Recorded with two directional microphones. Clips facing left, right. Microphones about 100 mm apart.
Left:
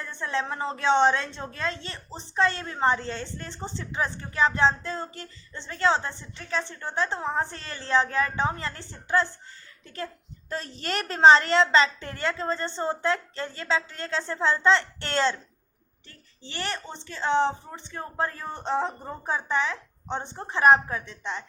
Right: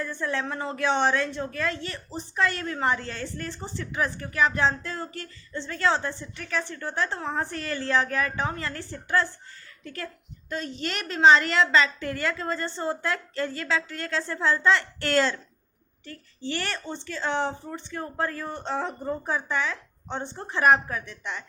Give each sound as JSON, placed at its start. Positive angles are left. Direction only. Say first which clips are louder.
{"t": 0.0, "sound": "a woman's voice", "louder": "right 1 dB", "side_deg": 20}
{"t": 10.5, "sound": "a woman's voice", "louder": "even", "side_deg": 35}